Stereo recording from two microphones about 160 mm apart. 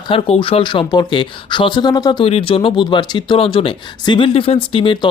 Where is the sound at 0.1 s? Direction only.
35° left (ahead or behind).